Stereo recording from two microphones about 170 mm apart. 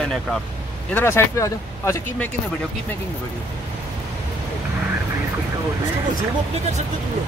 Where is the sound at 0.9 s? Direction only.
15° left (ahead or behind).